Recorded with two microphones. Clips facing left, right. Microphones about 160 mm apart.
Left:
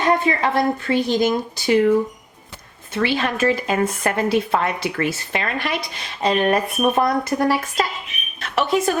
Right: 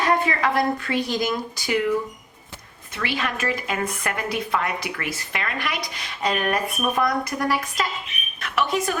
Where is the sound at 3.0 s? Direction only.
30° left (ahead or behind).